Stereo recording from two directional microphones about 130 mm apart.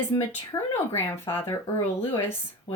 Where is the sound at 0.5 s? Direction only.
25° left (ahead or behind).